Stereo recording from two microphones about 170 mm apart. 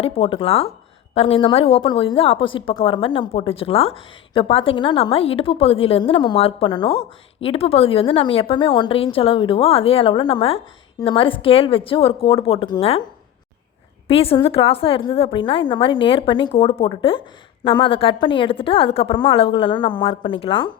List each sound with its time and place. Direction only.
0.0 s a woman's voice: 35° left (ahead or behind)
14.1 s a woman's voice: 35° left (ahead or behind)